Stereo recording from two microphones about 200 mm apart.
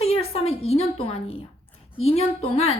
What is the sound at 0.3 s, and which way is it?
A woman's voice, 30° left (ahead or behind).